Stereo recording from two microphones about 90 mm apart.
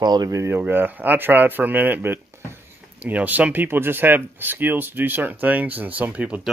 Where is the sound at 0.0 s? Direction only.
50° right (ahead or behind).